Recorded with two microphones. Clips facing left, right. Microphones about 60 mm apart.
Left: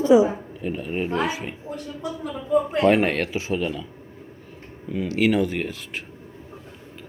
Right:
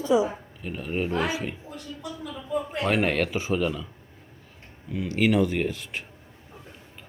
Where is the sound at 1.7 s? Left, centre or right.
Left.